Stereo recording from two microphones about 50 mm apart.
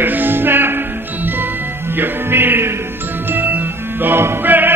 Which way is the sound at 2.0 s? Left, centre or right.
Right.